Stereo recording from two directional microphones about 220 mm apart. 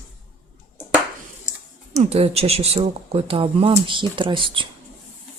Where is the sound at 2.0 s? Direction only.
25° right (ahead or behind).